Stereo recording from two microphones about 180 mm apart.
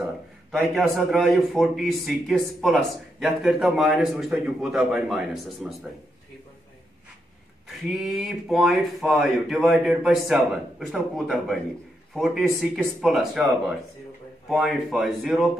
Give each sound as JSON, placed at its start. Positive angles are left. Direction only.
{"t": 0.5, "sound": "a man's voice", "side_deg": 0}
{"t": 7.6, "sound": "a man's voice", "side_deg": 0}